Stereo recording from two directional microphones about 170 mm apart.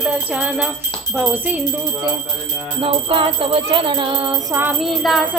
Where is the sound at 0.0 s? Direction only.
5° right (ahead or behind).